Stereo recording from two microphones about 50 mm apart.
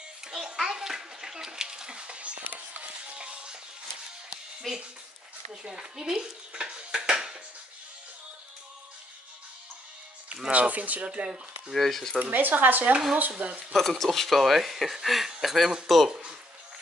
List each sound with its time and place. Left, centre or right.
0.6 s bathtub: centre
2.4 s a sound: right
3.2 s music: right
4.7 s speech: centre
5.5 s dishes: centre
10.5 s speech: right
11.7 s speech: centre
12.2 s speech: right
13.7 s speech: centre
16.1 s speech: centre